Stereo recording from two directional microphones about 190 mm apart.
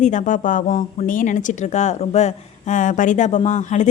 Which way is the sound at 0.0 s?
40° left (ahead or behind).